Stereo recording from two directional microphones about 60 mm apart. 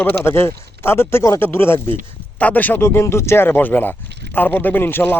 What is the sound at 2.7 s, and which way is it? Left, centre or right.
Speech, left.